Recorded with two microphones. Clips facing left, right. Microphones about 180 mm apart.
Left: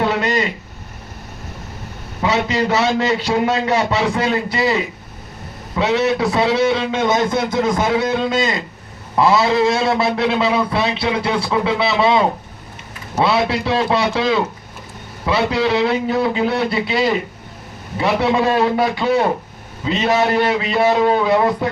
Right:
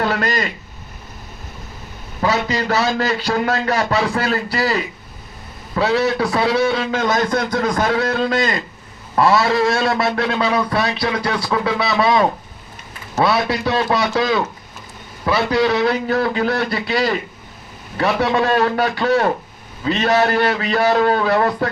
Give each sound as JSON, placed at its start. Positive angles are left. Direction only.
{"t": 0.0, "sound": "a sound", "side_deg": 25}
{"t": 2.2, "sound": "a man's voice", "side_deg": 25}
{"t": 15.6, "sound": "a man's voice", "side_deg": 25}
{"t": 18.3, "sound": "a man's voice", "side_deg": 20}